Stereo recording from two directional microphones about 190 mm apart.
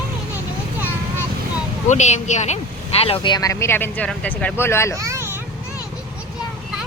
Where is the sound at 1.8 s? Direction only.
40° left (ahead or behind); by 5.0 s 15° left (ahead or behind).